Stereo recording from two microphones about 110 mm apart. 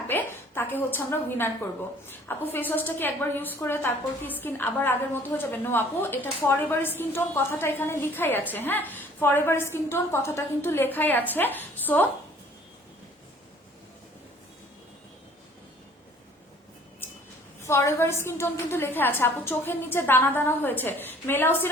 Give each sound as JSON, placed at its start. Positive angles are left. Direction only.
{"t": 0.1, "sound": "a woman's voice", "side_deg": 20}
{"t": 17.7, "sound": "a woman's voice", "side_deg": 25}